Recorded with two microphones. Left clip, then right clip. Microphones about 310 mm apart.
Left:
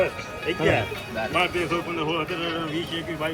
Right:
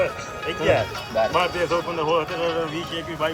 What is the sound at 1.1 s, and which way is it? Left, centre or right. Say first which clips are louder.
Speech: right 3 dB; right.